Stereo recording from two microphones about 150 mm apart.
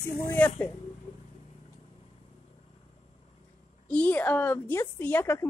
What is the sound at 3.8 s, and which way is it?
A woman's voice, 10° left (ahead or behind).